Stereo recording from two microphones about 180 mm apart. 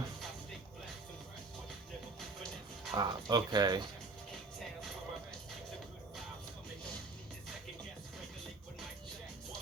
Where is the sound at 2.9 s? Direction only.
20° right (ahead or behind).